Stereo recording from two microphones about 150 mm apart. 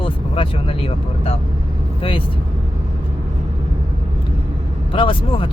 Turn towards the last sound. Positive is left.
turn(degrees=35)  # may be behind; listen again after turning